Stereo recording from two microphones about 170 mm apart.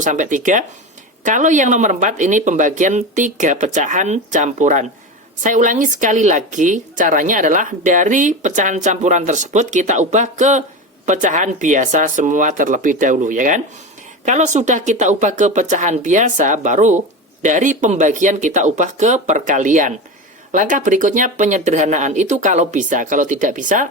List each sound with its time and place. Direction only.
0.0 s a woman's voice: 45° right (ahead or behind)